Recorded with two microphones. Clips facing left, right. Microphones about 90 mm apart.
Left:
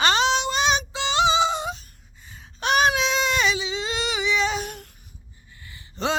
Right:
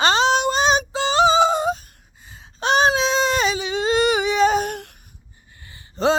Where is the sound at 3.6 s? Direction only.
50° right (ahead or behind).